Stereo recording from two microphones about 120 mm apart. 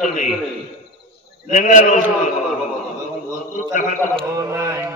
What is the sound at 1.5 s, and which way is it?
Speech, 90° left.